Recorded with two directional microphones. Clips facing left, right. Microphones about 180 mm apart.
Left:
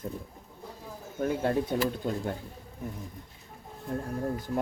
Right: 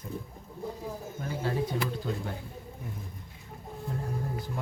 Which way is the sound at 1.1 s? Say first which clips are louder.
Left 5 dB; 60° left (ahead or behind).